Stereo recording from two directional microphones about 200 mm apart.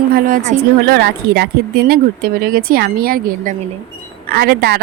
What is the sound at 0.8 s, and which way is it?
Speech, 55° right (ahead or behind).